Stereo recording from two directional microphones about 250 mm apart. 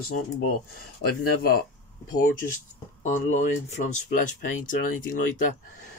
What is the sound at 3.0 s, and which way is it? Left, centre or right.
Speech, left.